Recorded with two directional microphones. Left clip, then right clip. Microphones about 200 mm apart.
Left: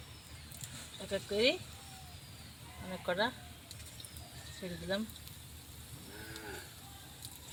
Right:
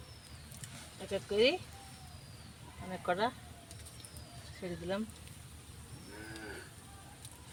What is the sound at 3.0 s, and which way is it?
Speech, 35° right (ahead or behind).